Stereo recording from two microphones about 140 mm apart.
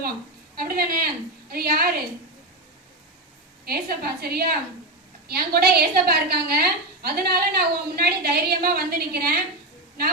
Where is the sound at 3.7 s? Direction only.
90° right.